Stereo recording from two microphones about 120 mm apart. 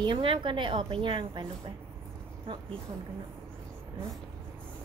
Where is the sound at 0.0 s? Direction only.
45° right (ahead or behind).